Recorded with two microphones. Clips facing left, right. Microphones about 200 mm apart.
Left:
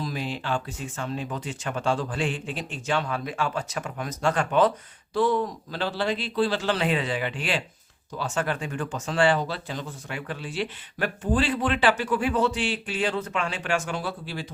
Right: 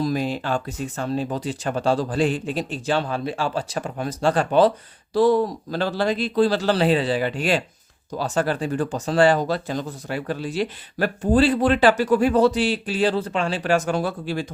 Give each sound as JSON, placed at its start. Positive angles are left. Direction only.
{"t": 0.0, "sound": "speech", "side_deg": -45}